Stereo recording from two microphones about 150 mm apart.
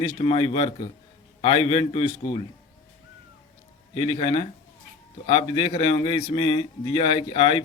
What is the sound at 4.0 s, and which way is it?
A man's voice, 40° left (ahead or behind).